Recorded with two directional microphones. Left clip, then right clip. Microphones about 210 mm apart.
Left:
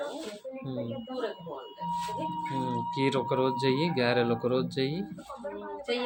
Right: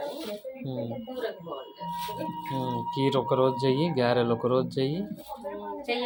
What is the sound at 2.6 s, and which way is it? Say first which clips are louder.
Speech: right 2 dB; 10° right (ahead or behind).